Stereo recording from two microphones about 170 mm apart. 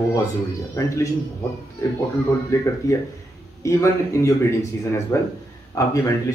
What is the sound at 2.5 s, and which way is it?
Speech, 20° left (ahead or behind).